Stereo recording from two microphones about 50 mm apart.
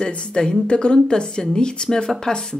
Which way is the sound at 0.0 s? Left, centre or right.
Centre.